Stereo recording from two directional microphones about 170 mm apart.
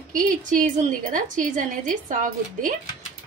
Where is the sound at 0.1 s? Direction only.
50° right (ahead or behind).